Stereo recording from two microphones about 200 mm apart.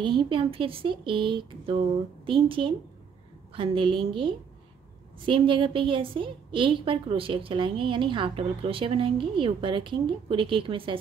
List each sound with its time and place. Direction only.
0.0 s a woman's voice: 25° right (ahead or behind)